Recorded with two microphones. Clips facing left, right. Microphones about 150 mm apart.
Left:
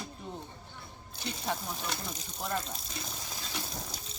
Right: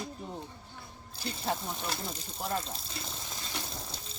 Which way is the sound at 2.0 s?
30° right (ahead or behind).